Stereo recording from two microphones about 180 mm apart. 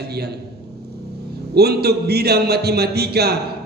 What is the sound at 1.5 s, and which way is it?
A man's voice, 65° right (ahead or behind).